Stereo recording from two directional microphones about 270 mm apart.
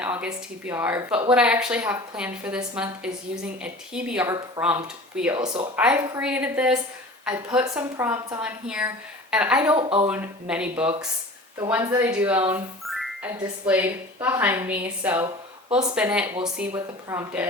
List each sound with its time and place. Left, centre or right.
0.0 s a woman's voice: centre
9.7 s speech: right
10.1 s speech: centre